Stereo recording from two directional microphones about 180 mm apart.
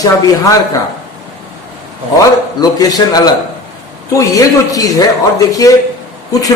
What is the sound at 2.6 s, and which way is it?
Speech, 20° left (ahead or behind).